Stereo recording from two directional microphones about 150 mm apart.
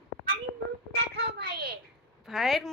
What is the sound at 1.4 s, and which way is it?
Speech, 90° right.